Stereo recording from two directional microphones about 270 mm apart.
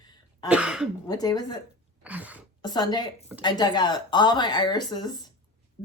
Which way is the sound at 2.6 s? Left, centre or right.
Centre.